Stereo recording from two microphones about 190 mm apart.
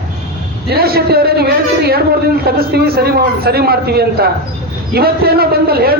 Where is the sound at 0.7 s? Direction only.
55° right (ahead or behind).